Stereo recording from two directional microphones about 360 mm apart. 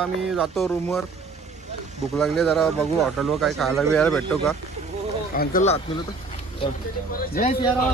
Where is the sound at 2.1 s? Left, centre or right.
Centre.